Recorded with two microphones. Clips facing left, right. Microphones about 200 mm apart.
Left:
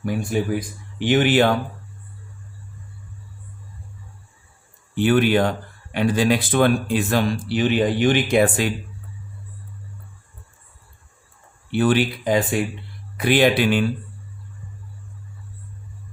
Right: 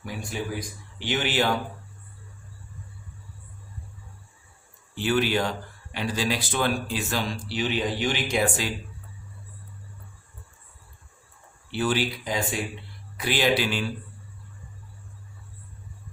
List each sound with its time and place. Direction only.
0.0 s speech: 55° left (ahead or behind)
4.9 s speech: 55° left (ahead or behind)
11.7 s speech: 55° left (ahead or behind)